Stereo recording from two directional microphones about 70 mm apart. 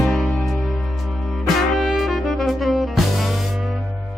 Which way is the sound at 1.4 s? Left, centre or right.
Centre.